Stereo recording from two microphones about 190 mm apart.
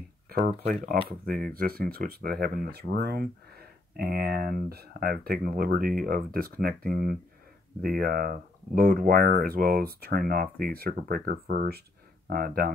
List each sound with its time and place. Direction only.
0.7 s speech: 50° right (ahead or behind)